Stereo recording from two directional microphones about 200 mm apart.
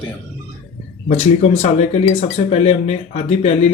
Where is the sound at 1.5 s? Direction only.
35° left (ahead or behind).